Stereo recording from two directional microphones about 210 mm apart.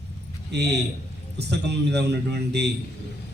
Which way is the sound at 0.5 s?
55° right (ahead or behind).